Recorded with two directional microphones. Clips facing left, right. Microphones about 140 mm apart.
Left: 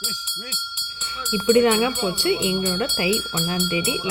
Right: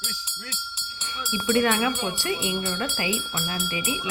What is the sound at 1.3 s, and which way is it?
Speech, 25° left (ahead or behind).